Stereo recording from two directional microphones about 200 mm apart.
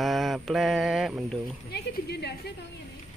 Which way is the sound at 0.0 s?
Centre (ahead or behind).